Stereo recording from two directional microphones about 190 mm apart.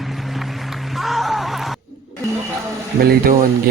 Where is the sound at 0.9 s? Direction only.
Centre (ahead or behind).